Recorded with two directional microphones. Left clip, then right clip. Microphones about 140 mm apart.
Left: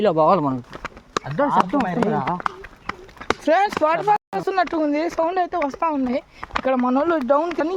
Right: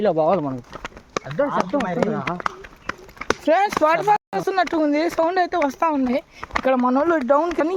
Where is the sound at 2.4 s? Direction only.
20° left (ahead or behind).